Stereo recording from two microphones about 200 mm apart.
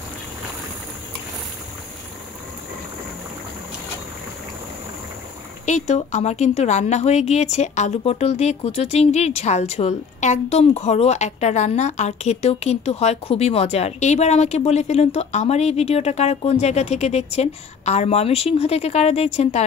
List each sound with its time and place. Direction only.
5.7 s speech: 35° left (ahead or behind)